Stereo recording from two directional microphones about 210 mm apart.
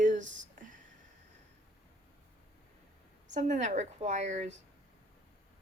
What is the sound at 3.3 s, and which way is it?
Speech, 35° right (ahead or behind).